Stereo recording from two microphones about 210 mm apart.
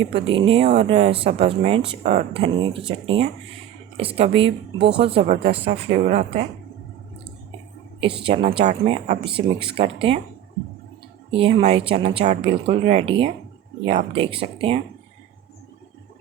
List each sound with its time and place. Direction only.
0.1 s speech: 25° right (ahead or behind)
8.0 s speech: 25° right (ahead or behind)
11.3 s speech: 25° right (ahead or behind)